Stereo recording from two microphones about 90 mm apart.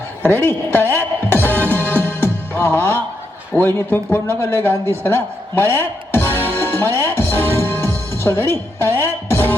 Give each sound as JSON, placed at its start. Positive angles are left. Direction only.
{"t": 0.2, "sound": "music", "side_deg": 25}
{"t": 2.6, "sound": "a man's voice", "side_deg": 25}
{"t": 6.3, "sound": "music", "side_deg": 25}